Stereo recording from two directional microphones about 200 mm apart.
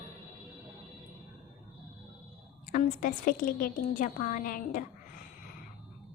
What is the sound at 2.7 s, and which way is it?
A woman's voice, 45° left (ahead or behind).